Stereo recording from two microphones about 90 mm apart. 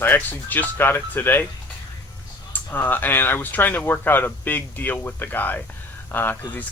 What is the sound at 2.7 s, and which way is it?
Speech, 20° left (ahead or behind).